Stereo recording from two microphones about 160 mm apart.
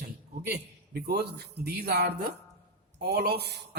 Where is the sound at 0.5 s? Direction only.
90° right.